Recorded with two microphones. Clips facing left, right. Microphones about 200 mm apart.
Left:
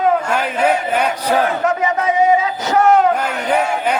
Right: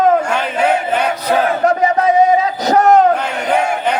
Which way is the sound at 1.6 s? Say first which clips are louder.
Right 4 dB; 35° right (ahead or behind).